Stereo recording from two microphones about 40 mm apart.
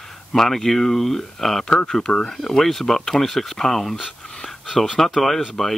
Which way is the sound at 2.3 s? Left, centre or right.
Centre.